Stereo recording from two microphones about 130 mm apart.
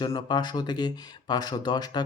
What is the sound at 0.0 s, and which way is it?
Speech, 35° left (ahead or behind).